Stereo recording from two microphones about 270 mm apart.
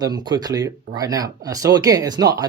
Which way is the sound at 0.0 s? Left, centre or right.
Centre.